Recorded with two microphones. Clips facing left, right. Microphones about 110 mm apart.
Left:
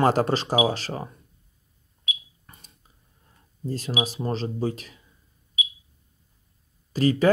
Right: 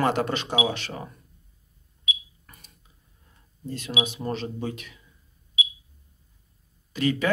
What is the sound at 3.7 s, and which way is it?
Speech, 35° left (ahead or behind).